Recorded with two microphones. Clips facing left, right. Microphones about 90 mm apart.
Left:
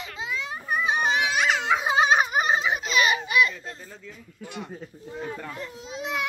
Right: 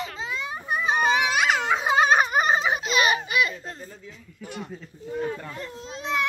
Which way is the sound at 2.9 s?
40° right (ahead or behind).